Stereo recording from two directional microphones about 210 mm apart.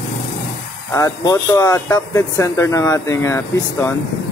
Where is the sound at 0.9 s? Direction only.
15° left (ahead or behind).